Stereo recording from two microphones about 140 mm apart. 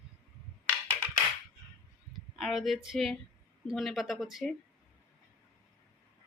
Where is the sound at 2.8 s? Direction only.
Centre (ahead or behind).